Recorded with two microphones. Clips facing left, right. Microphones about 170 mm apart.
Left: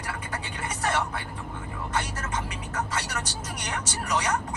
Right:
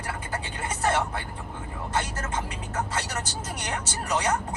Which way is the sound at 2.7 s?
30° right (ahead or behind).